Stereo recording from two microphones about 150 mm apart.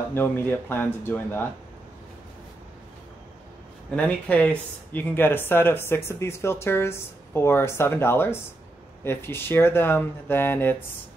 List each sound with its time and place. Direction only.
0.1 s speech: 15° left (ahead or behind)
3.9 s speech: 10° left (ahead or behind)